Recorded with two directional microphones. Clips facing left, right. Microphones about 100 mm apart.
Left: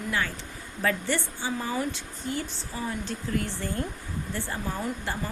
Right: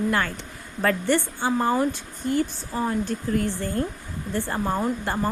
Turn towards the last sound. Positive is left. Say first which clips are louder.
# right 6 dB
turn(degrees=-50)  # may be behind; listen again after turning